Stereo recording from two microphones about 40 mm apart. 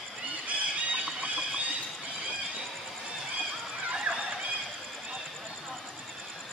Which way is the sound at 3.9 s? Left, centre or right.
Right.